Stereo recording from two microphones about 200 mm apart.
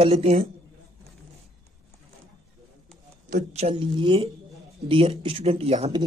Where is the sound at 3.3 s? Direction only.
30° right (ahead or behind).